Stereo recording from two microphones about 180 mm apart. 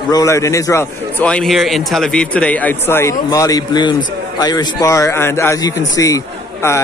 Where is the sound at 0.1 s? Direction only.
20° left (ahead or behind).